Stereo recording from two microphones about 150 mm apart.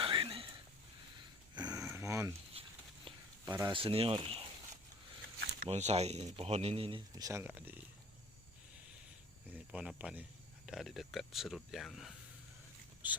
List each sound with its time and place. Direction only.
0.0 s a sound: 35° right (ahead or behind)
1.5 s a sound: 25° right (ahead or behind)
3.4 s speech: 20° right (ahead or behind)
3.7 s speech: 35° right (ahead or behind)
5.6 s speech: 45° right (ahead or behind)
7.2 s speech: 20° right (ahead or behind)
9.5 s speech: 10° right (ahead or behind)